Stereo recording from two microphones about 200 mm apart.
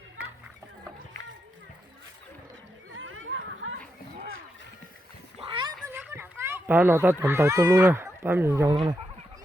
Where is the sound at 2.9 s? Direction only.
75° right (ahead or behind).